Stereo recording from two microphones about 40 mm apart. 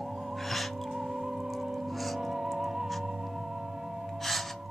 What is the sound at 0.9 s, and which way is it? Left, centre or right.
Music, centre.